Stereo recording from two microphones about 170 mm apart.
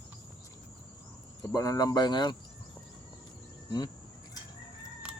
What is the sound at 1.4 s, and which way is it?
Speech, 20° left (ahead or behind).